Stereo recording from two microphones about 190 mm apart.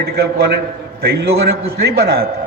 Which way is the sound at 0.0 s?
60° right (ahead or behind).